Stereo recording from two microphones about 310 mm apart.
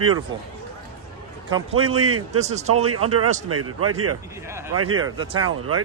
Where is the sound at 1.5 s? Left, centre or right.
Centre.